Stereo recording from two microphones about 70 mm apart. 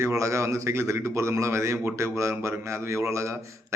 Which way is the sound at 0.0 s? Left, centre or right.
Right.